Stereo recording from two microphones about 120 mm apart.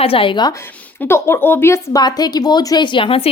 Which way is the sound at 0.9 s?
20° left (ahead or behind).